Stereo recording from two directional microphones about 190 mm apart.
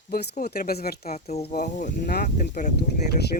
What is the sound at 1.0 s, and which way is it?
Speech, 35° left (ahead or behind).